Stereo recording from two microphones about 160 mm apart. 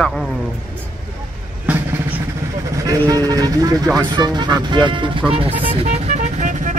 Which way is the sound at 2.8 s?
25° right (ahead or behind).